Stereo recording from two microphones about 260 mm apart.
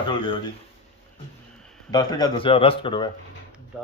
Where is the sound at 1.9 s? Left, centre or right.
Centre.